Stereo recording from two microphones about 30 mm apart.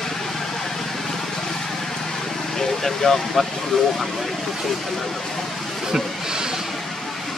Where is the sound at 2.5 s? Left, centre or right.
Centre.